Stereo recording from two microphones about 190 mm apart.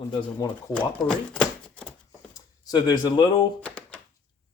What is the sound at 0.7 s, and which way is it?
Speech, 5° left (ahead or behind).